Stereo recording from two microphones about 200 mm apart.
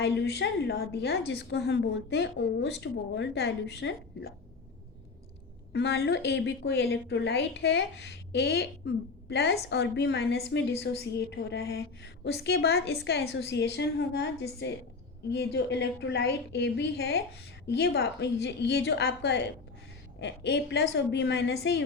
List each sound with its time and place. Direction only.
0.0 s a woman's voice: 60° left (ahead or behind)
5.7 s a woman's voice: 60° left (ahead or behind)